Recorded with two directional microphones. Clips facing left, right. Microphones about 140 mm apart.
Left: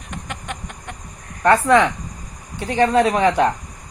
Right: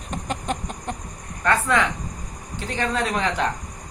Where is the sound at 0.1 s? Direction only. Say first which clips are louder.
Right 4 dB; 35° right (ahead or behind).